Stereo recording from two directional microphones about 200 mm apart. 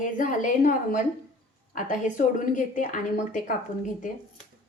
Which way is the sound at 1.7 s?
40° left (ahead or behind).